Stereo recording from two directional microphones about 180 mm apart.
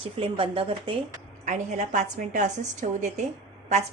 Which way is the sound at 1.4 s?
40° right (ahead or behind).